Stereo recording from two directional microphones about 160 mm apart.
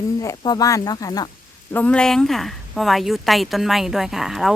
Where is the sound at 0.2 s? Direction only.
20° left (ahead or behind).